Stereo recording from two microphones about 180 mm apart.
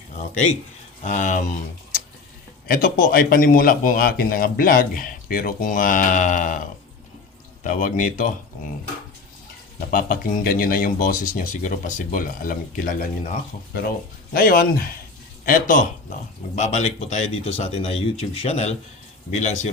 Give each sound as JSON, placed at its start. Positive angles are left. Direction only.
{"t": 1.0, "sound": "a man's voice", "side_deg": 45}
{"t": 2.6, "sound": "a man's voice", "side_deg": 55}
{"t": 7.6, "sound": "a man's voice", "side_deg": 45}
{"t": 9.9, "sound": "a man's voice", "side_deg": 50}
{"t": 14.3, "sound": "a man's voice", "side_deg": 55}